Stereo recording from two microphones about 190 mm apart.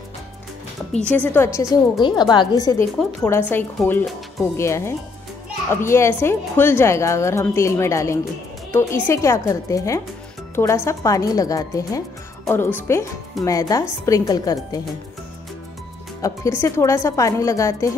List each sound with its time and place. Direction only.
1.0 s a woman's voice: 10° left (ahead or behind)
2.0 s a woman's voice: 25° left (ahead or behind)
16.2 s a woman's voice: 15° left (ahead or behind)